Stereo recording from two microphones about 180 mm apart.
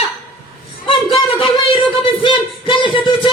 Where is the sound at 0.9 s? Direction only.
30° left (ahead or behind).